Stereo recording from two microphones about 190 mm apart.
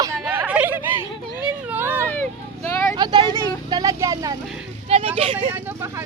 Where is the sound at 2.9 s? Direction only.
25° right (ahead or behind).